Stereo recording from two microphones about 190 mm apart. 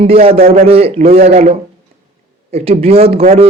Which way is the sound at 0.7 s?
30° right (ahead or behind).